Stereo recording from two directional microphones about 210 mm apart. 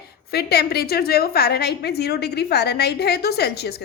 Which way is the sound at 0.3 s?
50° left (ahead or behind).